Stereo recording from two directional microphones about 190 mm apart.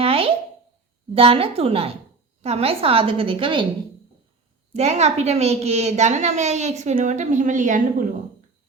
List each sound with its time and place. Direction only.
0.0 s a sound: 30° right (ahead or behind)
1.1 s a woman's voice: 30° right (ahead or behind)
4.7 s a woman's voice: 35° right (ahead or behind)